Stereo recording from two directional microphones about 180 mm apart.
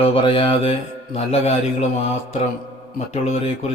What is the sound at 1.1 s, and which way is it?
Speech, 35° left (ahead or behind).